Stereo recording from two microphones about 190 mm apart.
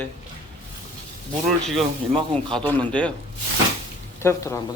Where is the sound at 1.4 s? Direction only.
Centre (ahead or behind).